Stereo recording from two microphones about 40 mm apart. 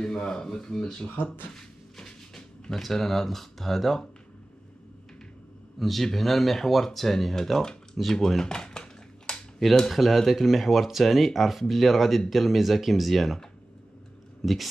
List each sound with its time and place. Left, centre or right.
0.0 s speech: centre
1.0 s speech: left
1.5 s a sound: centre
2.8 s speech: centre
5.8 s a man's voice: centre
8.1 s dishes: centre
9.9 s speech: centre
14.4 s speech: centre